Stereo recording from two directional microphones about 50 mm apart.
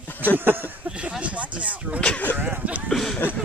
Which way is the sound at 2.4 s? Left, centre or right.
Right.